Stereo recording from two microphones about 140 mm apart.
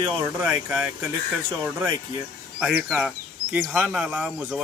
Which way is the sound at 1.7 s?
15° right (ahead or behind).